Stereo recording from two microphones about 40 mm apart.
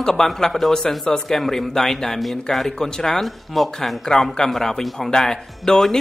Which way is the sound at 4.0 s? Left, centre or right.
Centre.